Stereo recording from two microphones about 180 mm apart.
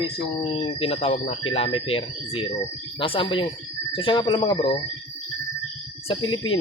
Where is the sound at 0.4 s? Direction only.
30° left (ahead or behind).